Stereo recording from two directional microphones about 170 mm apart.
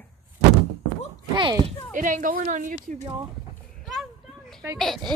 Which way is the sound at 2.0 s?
50° right (ahead or behind).